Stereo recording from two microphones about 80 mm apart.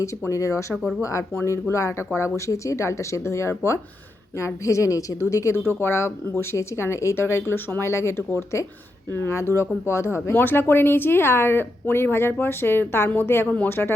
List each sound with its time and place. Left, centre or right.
0.0 s speech: left
0.8 s speech: centre
1.5 s speech: left
5.6 s speech: left